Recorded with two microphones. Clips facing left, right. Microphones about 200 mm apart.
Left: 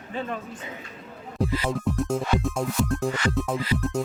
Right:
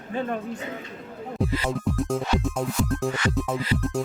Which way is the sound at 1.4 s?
Centre (ahead or behind).